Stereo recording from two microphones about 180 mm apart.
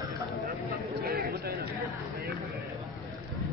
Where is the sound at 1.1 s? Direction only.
50° right (ahead or behind).